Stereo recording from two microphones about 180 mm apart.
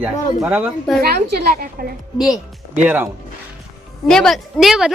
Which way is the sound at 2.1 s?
5° right (ahead or behind).